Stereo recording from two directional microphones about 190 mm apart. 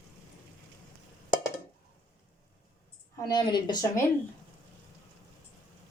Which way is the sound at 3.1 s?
20° left (ahead or behind).